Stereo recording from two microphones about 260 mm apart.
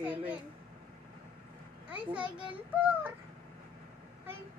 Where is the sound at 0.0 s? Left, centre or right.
Centre.